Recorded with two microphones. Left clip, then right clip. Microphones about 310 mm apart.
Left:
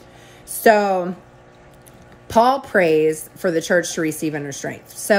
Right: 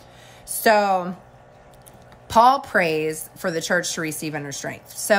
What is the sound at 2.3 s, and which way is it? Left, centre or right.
A woman's voice, centre.